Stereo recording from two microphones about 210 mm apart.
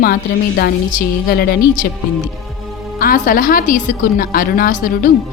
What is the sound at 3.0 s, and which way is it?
A woman's voice, 40° left (ahead or behind).